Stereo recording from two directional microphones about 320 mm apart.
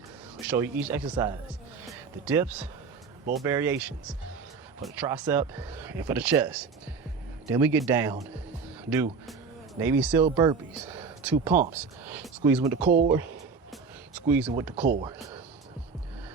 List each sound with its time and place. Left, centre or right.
0.4 s speech: centre
10.9 s a sound: centre
11.4 s speech: right
11.7 s speech: centre
13.1 s a sound: centre
14.2 s speech: centre